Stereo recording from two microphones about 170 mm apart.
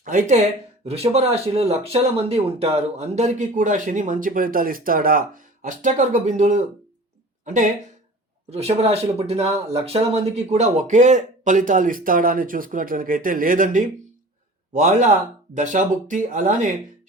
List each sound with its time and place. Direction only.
0.0 s speech: 50° right (ahead or behind)